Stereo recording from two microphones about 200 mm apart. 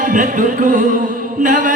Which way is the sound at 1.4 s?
40° right (ahead or behind).